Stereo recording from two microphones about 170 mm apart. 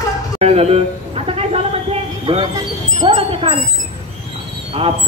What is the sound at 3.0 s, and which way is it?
Wind chime, 30° right (ahead or behind).